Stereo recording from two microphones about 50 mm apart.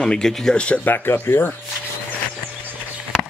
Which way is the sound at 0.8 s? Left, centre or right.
Left.